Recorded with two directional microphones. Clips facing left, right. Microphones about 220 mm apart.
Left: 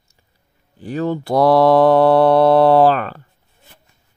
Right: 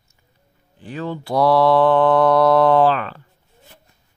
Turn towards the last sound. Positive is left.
turn(degrees=45)  # may be behind; listen again after turning